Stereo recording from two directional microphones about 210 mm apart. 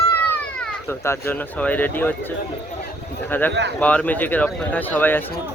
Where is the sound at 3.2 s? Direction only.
10° left (ahead or behind).